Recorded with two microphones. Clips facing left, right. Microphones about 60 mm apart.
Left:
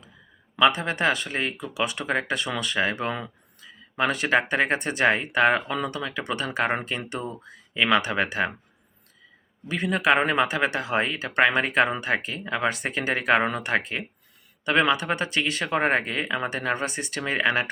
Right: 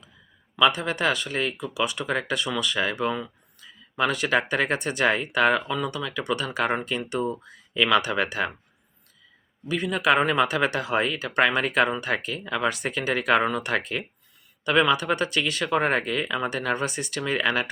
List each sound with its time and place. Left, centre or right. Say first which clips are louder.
0.5 s speech: left 1 dB; left
3.1 s speech: right 2 dB; left
3.6 s speech: even; left
9.6 s speech: even; left